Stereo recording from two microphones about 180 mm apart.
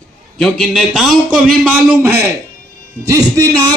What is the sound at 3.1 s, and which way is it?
Speech, 20° right (ahead or behind).